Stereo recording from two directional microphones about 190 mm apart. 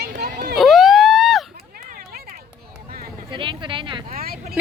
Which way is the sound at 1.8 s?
50° right (ahead or behind).